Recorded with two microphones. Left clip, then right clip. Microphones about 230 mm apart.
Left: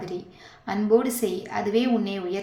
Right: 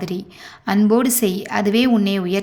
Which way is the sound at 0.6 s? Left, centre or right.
Right.